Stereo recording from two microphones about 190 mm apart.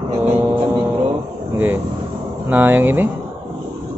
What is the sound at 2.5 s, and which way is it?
Speech, 10° right (ahead or behind).